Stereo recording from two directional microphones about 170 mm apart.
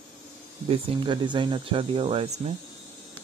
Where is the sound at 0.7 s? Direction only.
30° right (ahead or behind).